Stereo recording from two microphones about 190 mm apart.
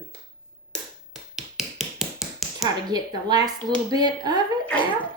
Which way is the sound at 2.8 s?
20° right (ahead or behind).